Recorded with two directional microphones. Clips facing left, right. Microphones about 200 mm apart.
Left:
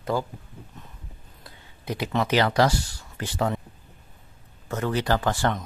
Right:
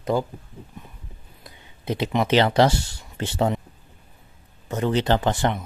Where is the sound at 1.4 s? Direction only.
20° right (ahead or behind).